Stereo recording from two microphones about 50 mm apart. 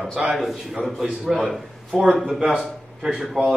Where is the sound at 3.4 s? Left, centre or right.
Centre.